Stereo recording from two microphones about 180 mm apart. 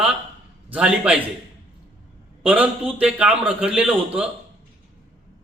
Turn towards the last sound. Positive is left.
turn(degrees=-5)  # may be behind; listen again after turning